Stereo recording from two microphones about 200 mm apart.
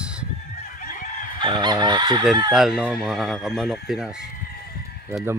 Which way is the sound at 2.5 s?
Centre (ahead or behind).